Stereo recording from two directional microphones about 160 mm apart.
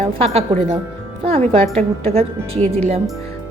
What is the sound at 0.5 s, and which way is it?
Speech, 35° right (ahead or behind).